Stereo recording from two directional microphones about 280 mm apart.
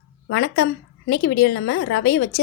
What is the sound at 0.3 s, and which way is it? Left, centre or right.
A woman's voice, left.